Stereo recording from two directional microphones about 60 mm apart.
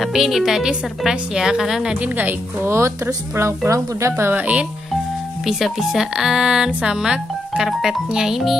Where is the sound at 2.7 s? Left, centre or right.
Right.